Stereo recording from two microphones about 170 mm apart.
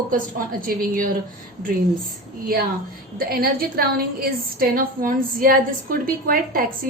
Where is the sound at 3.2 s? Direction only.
60° right (ahead or behind).